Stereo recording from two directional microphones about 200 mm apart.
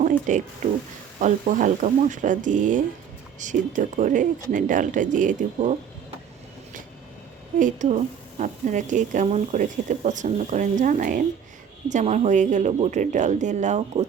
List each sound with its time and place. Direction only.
0.0 s speech: 40° right (ahead or behind)
7.6 s speech: 40° right (ahead or behind)